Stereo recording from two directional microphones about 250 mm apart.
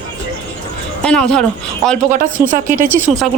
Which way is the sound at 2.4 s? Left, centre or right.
Centre.